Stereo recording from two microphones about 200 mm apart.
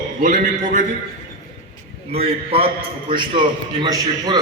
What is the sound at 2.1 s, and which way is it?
A man's voice, 30° right (ahead or behind).